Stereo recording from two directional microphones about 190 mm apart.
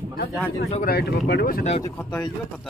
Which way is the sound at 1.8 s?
15° left (ahead or behind).